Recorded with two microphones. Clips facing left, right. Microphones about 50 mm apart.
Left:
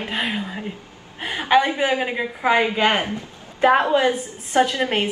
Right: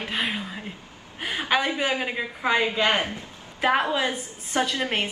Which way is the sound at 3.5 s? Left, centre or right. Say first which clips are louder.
Left 6 dB; centre.